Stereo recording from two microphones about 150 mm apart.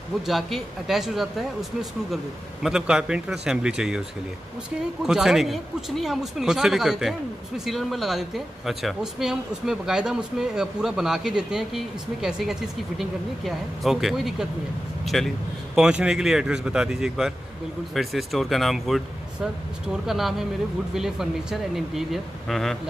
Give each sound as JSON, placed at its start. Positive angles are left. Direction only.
{"t": 0.3, "sound": "speech", "side_deg": 0}
{"t": 5.0, "sound": "speech", "side_deg": -5}